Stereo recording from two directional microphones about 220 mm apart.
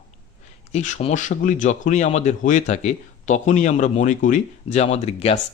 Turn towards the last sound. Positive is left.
turn(degrees=30)  # may be behind; listen again after turning